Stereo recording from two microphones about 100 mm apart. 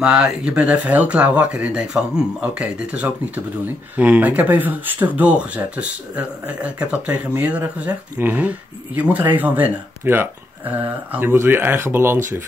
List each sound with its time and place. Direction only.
0.0 s speech: 5° right (ahead or behind); by 12.2 s 25° right (ahead or behind)